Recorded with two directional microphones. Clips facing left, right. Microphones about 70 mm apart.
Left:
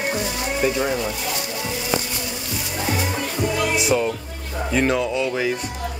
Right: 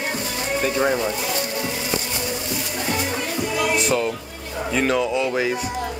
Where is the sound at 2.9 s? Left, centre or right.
Centre.